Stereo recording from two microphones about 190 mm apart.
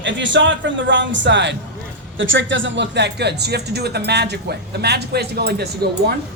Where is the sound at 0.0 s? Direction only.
70° right (ahead or behind).